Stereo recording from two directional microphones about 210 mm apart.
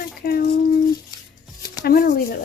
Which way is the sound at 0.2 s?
45° left (ahead or behind).